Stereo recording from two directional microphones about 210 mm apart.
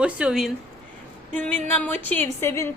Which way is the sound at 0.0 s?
5° right (ahead or behind).